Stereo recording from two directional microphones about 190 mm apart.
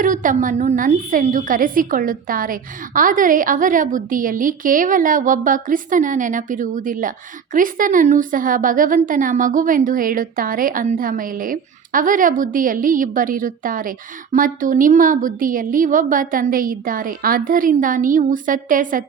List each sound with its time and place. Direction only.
0.0 s a woman's voice: 45° right (ahead or behind)